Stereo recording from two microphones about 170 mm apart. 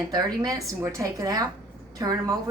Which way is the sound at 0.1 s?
20° right (ahead or behind).